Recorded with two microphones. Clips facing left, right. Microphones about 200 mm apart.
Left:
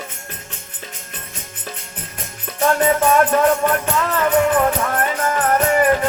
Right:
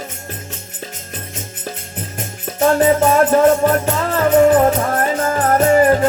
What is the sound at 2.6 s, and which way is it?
Music, 25° right (ahead or behind).